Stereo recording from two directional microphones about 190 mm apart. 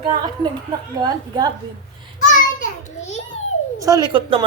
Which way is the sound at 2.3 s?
40° left (ahead or behind).